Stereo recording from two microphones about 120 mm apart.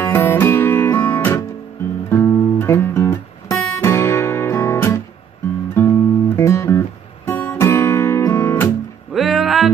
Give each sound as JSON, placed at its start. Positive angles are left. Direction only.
{"t": 0.0, "sound": "music", "side_deg": 20}
{"t": 9.1, "sound": "music", "side_deg": 0}